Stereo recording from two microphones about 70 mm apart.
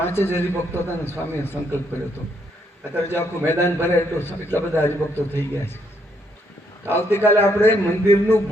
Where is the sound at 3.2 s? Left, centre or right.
Left.